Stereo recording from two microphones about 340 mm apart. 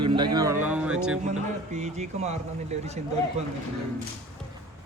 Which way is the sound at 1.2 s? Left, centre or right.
Centre.